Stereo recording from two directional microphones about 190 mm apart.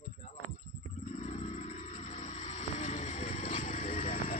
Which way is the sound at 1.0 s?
40° left (ahead or behind).